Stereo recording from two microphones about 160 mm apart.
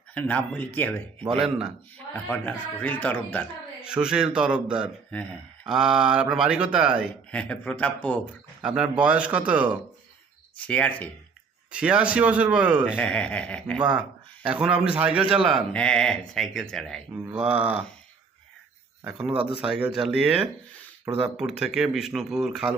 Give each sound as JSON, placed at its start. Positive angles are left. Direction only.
{"t": 0.1, "sound": "speech", "side_deg": 10}
{"t": 1.4, "sound": "speech", "side_deg": -5}
{"t": 2.1, "sound": "speech", "side_deg": 10}
{"t": 3.8, "sound": "speech", "side_deg": -5}
{"t": 7.3, "sound": "speech", "side_deg": 10}
{"t": 8.6, "sound": "speech", "side_deg": -5}
{"t": 10.6, "sound": "speech", "side_deg": 10}
{"t": 11.7, "sound": "speech", "side_deg": -5}
{"t": 13.0, "sound": "speech", "side_deg": 5}
{"t": 14.4, "sound": "speech", "side_deg": -5}
{"t": 17.3, "sound": "speech", "side_deg": -10}
{"t": 19.0, "sound": "speech", "side_deg": -5}